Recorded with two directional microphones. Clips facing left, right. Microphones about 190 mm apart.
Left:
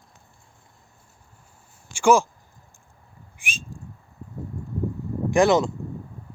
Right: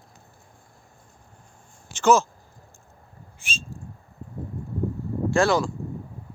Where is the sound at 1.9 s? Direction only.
10° left (ahead or behind).